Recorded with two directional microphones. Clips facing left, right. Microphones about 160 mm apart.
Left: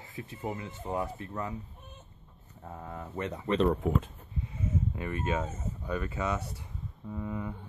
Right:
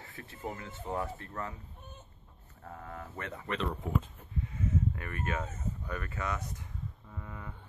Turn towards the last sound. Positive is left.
turn(degrees=15)  # may be behind; listen again after turning